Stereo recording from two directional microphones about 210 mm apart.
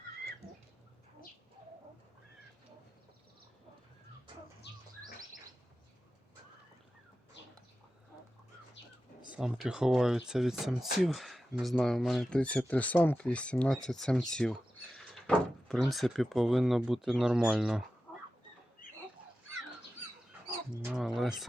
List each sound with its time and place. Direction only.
4.7 s bird: 55° left (ahead or behind)
9.3 s speech: 5° right (ahead or behind)
20.9 s a sound: centre (ahead or behind)